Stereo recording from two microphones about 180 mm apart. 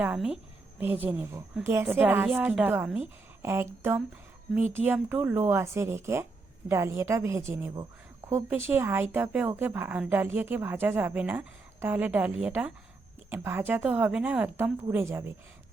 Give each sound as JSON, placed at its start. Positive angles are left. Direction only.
{"t": 0.0, "sound": "a woman's voice", "side_deg": -5}